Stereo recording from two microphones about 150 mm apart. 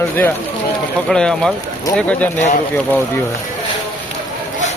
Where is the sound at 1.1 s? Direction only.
5° left (ahead or behind).